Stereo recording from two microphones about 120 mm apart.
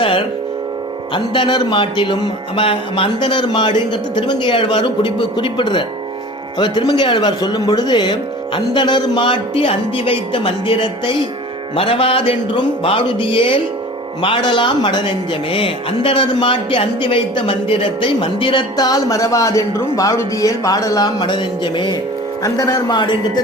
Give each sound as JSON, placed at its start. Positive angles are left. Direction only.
{"t": 1.1, "sound": "speech", "side_deg": 40}
{"t": 21.2, "sound": "speech", "side_deg": 40}
{"t": 22.4, "sound": "speech", "side_deg": 30}